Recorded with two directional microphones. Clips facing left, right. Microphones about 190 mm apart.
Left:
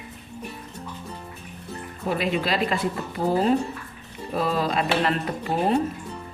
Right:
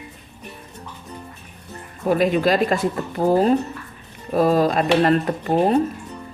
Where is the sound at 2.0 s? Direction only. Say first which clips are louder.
Right 7 dB; 45° right (ahead or behind).